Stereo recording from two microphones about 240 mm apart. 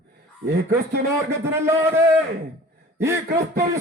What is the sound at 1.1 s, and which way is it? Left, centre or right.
A man's voice, centre.